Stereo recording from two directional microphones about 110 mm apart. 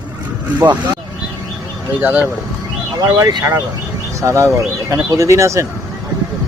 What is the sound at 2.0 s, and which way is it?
Speech, 15° right (ahead or behind).